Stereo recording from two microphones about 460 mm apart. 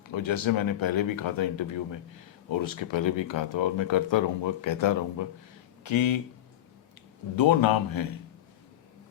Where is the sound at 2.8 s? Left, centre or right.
Left.